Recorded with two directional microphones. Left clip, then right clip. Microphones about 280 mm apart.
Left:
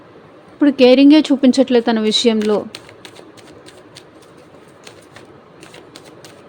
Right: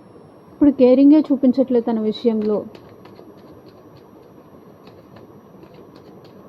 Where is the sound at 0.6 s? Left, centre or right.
Centre.